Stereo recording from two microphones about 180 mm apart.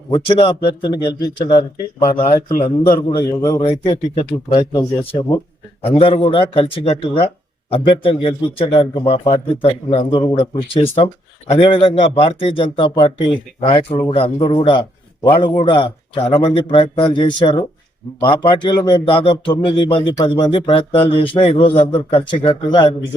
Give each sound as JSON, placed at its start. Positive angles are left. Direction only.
{"t": 0.1, "sound": "speech", "side_deg": 30}
{"t": 3.2, "sound": "speech", "side_deg": 20}
{"t": 3.6, "sound": "a man's voice", "side_deg": 35}
{"t": 4.5, "sound": "speech", "side_deg": 20}
{"t": 6.0, "sound": "a man's voice", "side_deg": 30}